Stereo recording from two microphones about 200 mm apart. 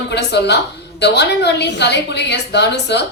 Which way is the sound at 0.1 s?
60° left (ahead or behind).